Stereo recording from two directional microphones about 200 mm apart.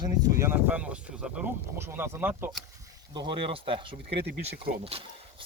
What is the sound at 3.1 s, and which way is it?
Speech, 25° right (ahead or behind).